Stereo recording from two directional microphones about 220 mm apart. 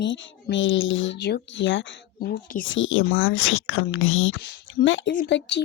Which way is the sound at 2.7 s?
60° left (ahead or behind).